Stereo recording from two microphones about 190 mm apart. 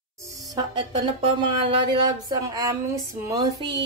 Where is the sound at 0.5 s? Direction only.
25° right (ahead or behind).